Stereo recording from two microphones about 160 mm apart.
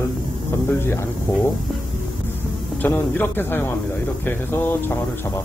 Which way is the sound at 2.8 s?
10° left (ahead or behind).